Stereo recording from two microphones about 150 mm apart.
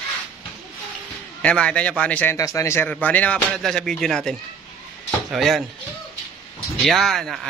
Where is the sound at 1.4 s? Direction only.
5° left (ahead or behind).